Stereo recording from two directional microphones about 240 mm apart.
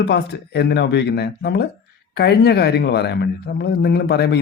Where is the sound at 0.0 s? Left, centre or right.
Left.